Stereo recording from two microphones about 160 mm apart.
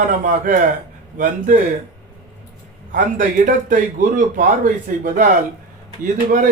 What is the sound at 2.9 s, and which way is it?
A man's voice, 55° right (ahead or behind).